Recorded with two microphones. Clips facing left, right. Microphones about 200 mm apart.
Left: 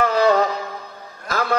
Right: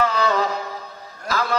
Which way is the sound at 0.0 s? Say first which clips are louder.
Left 4 dB; 50° left (ahead or behind).